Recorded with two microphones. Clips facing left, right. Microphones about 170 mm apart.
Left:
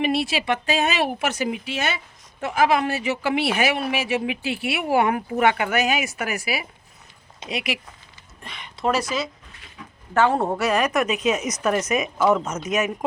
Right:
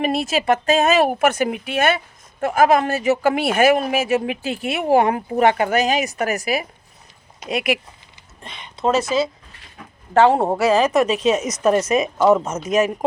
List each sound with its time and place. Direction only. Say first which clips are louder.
0.0 s speech: right 3 dB; 45° right (ahead or behind)
8.4 s speech: right 3 dB; 20° right (ahead or behind)
10.3 s speech: right 5 dB; 25° right (ahead or behind)